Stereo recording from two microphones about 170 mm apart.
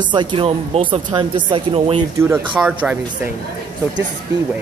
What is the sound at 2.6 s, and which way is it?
Speech, 5° right (ahead or behind).